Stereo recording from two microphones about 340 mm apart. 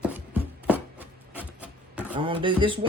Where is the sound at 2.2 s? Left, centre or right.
Centre.